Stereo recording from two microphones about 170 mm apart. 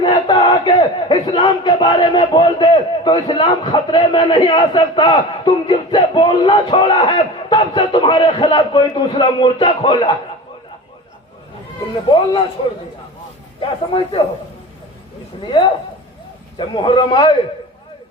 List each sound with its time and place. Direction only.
0.0 s speech: 25° left (ahead or behind)
12.1 s speech: 25° left (ahead or behind)
13.6 s speech: 30° left (ahead or behind)
16.6 s speech: 30° left (ahead or behind)